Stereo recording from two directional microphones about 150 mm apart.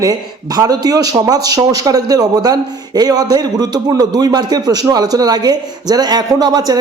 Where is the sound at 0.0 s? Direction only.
25° right (ahead or behind).